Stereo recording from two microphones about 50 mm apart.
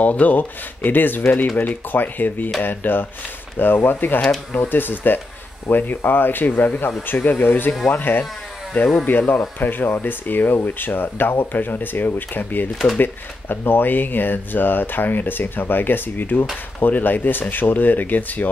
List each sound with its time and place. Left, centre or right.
0.0 s speech: left